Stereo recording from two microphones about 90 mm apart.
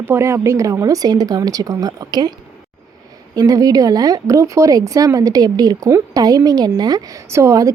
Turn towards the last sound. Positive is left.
turn(degrees=-35)  # may be behind; listen again after turning